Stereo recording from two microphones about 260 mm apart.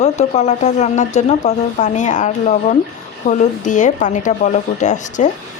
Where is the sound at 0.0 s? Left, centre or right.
Left.